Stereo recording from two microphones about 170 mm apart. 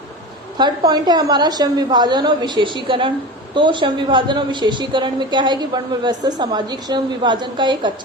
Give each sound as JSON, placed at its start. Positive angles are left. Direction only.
{"t": 0.5, "sound": "speech", "side_deg": -25}